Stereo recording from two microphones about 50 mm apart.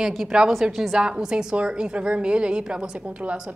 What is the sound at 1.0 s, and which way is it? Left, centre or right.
A woman's voice, centre.